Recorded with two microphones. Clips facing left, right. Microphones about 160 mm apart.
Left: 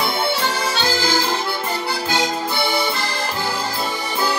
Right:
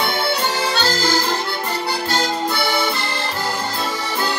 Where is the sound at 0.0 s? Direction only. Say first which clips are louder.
Even; centre (ahead or behind).